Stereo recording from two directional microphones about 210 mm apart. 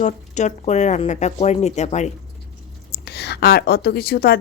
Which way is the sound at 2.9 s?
50° left (ahead or behind).